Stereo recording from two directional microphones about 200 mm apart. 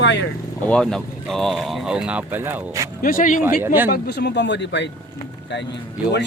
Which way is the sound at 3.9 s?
55° left (ahead or behind).